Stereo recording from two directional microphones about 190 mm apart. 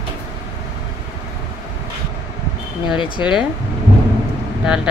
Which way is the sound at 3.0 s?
25° left (ahead or behind).